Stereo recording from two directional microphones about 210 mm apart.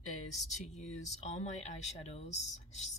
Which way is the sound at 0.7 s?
35° left (ahead or behind).